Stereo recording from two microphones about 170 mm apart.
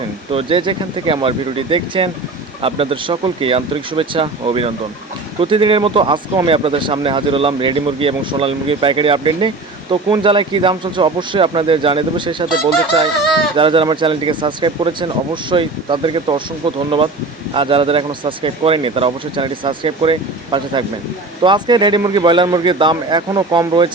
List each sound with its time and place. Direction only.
0.3 s speech: 30° right (ahead or behind)
13.6 s speech: 30° right (ahead or behind)